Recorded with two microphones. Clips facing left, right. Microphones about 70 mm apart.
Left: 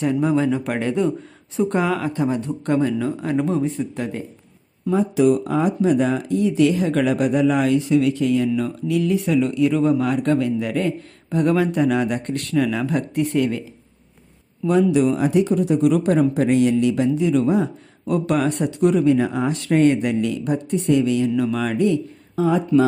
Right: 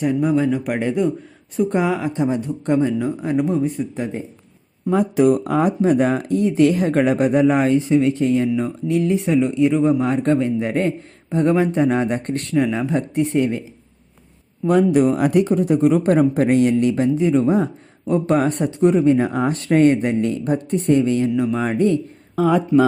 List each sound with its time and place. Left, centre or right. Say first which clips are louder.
0.0 s speech: right 1 dB; centre
0.7 s speech: right 1 dB; centre
3.9 s speech: right 1 dB; centre
4.9 s speech: right 1 dB; right
14.7 s speech: right 2 dB; right
15.4 s speech: right 2 dB; right
21.3 s speech: right 1 dB; right
22.4 s speech: right 2 dB; right